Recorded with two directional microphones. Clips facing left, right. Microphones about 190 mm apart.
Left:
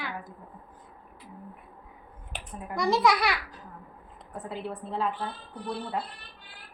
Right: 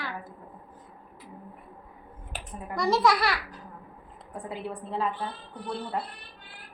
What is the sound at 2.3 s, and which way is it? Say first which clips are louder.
A child's voice: even; centre (ahead or behind).